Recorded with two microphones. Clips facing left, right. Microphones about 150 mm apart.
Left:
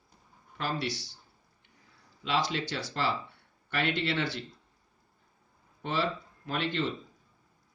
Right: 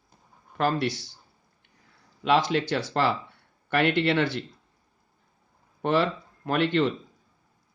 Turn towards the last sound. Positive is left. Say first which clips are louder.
# right 8 dB
turn(degrees=-60)  # may be behind; listen again after turning